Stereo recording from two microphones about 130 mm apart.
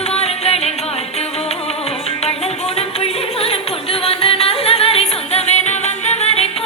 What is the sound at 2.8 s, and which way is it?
Music, 50° left (ahead or behind).